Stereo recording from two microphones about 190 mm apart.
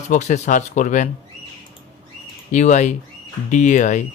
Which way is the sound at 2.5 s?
40° left (ahead or behind).